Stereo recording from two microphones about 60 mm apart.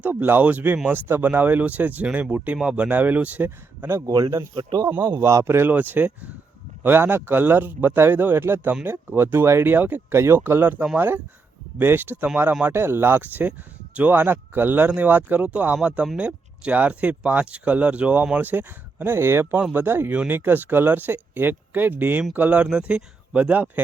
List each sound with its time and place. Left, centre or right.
0.0 s speech: right
4.0 s speech: right
5.2 s speech: right
5.5 s speech: right
5.7 s speech: right
10.2 s speech: right